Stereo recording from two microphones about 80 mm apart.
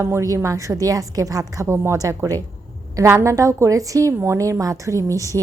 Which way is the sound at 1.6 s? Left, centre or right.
Right.